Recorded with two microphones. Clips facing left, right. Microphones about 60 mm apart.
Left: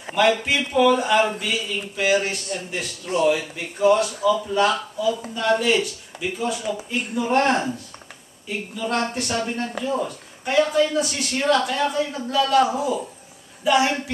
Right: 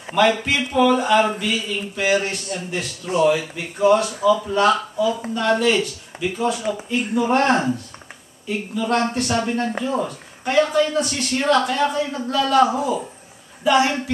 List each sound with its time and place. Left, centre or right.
0.2 s a man's voice: centre
4.6 s a man's voice: centre
6.6 s speech: centre
7.2 s a man's voice: centre
9.7 s speech: right
10.0 s a man's voice: centre